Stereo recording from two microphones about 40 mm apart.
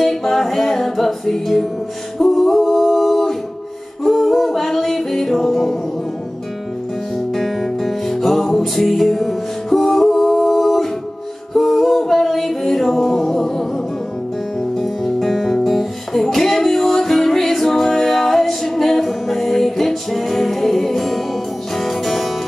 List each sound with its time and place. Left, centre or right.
0.0 s music: centre
2.1 s singing: centre
4.0 s music: centre
7.3 s music: centre
15.1 s music: centre